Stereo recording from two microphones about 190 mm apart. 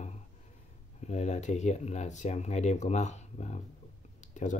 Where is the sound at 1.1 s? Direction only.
35° left (ahead or behind).